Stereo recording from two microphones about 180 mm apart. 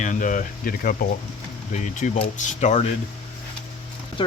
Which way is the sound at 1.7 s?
40° left (ahead or behind).